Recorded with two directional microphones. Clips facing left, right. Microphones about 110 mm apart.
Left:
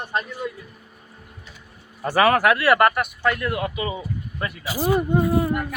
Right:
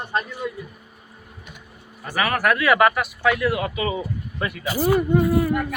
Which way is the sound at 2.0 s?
30° left (ahead or behind).